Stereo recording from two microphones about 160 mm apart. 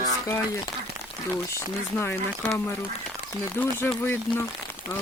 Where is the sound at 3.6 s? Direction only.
15° left (ahead or behind).